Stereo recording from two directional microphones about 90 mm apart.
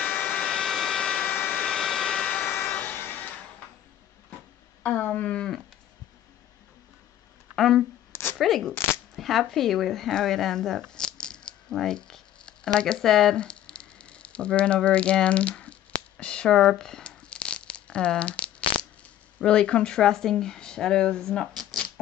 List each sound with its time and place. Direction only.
0.0 s vehicle: 20° left (ahead or behind)
0.5 s vehicle: 5° left (ahead or behind)
1.2 s vehicle: 20° left (ahead or behind)
1.7 s vehicle: 5° left (ahead or behind)
2.3 s vehicle: 25° left (ahead or behind)
4.8 s speech: 20° left (ahead or behind)
7.5 s a sound: 5° left (ahead or behind)
8.1 s a sound: 25° left (ahead or behind)
8.4 s speech: centre (ahead or behind)
16.2 s a sound: 10° left (ahead or behind)
19.3 s speech: 10° left (ahead or behind)